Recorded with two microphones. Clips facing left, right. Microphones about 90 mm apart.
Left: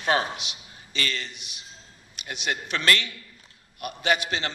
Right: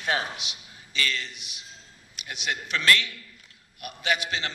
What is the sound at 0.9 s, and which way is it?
Speech, 45° left (ahead or behind).